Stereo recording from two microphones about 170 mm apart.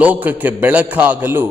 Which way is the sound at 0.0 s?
10° right (ahead or behind).